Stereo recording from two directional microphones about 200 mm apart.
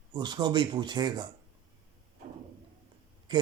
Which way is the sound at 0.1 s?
20° right (ahead or behind).